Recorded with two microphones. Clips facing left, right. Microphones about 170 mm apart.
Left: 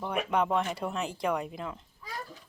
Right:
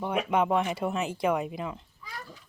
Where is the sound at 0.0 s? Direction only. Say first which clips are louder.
Right 2 dB; 5° right (ahead or behind).